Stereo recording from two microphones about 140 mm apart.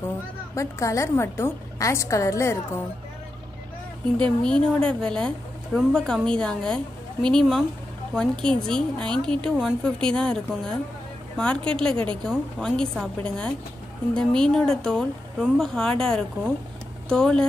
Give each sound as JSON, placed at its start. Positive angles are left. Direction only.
{"t": 0.6, "sound": "a woman's voice", "side_deg": 20}
{"t": 4.2, "sound": "a woman's voice", "side_deg": 5}